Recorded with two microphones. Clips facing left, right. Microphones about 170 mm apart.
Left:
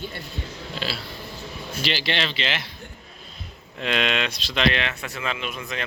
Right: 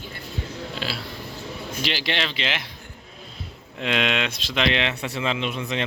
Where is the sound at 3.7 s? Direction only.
15° right (ahead or behind).